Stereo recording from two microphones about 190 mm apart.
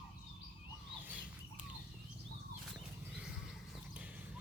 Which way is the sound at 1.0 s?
5° right (ahead or behind).